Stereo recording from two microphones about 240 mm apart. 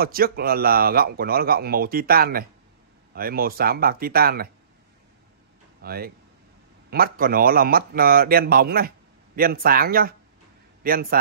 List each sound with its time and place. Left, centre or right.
0.0 s a man's voice: right
5.8 s a man's voice: right